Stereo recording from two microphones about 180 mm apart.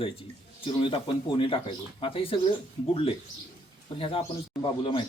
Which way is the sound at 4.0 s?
30° left (ahead or behind).